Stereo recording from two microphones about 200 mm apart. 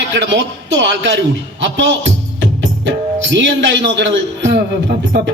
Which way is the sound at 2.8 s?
65° right (ahead or behind).